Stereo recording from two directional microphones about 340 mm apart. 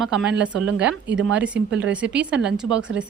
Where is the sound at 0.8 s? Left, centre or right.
Right.